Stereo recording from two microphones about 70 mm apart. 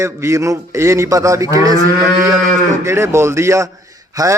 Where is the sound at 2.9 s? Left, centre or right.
Right.